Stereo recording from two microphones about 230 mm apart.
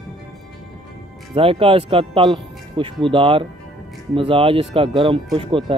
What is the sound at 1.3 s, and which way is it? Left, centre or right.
Speech, right.